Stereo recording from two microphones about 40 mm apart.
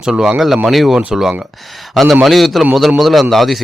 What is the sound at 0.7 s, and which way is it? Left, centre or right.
A man's voice, centre.